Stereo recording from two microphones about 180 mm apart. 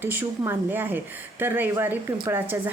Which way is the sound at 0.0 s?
10° right (ahead or behind).